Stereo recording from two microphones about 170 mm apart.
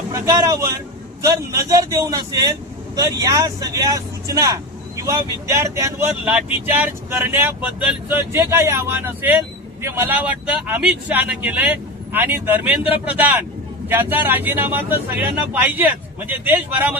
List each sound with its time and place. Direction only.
0.1 s a man's voice: 20° right (ahead or behind)
1.7 s speech: 20° right (ahead or behind)